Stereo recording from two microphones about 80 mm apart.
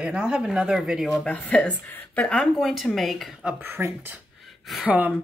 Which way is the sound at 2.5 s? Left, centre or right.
Centre.